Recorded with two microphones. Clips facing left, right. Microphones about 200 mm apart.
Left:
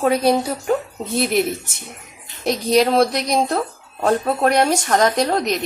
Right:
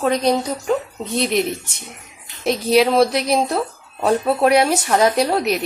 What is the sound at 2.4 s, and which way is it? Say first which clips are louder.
Speech: right 1 dB; centre (ahead or behind).